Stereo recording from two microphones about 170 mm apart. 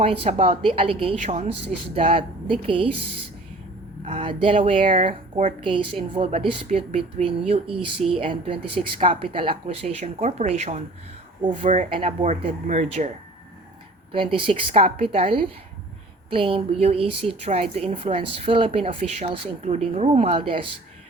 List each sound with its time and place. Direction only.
0.0 s a woman's voice: 35° right (ahead or behind)
4.0 s a woman's voice: 35° right (ahead or behind)
5.5 s a woman's voice: 30° right (ahead or behind)
11.9 s a woman's voice: 30° right (ahead or behind)
14.1 s a woman's voice: 30° right (ahead or behind)